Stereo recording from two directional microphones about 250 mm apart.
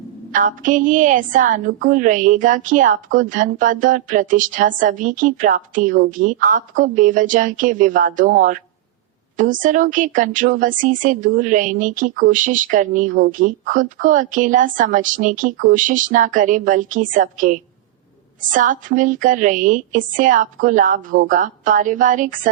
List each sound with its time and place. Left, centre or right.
0.3 s a woman's voice: right